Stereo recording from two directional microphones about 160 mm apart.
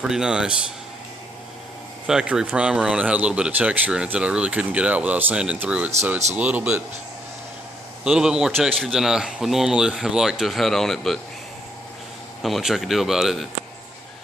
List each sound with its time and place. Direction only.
0.0 s a man's voice: 5° right (ahead or behind)
2.0 s speech: 5° right (ahead or behind)
8.0 s a man's voice: 5° right (ahead or behind)
12.4 s a man's voice: centre (ahead or behind)